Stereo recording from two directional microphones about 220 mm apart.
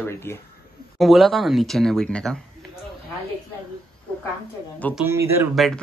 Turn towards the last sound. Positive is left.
turn(degrees=0)  # may be behind; listen again after turning